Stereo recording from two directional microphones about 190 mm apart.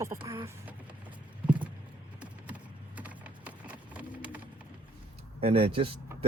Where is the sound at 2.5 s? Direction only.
5° right (ahead or behind).